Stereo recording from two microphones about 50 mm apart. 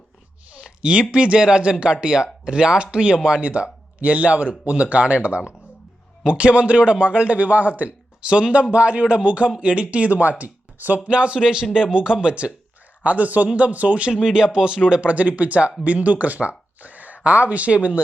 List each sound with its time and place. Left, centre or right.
0.6 s a sound: right
1.1 s a man's voice: right
11.0 s a man's voice: right
14.1 s a man's voice: centre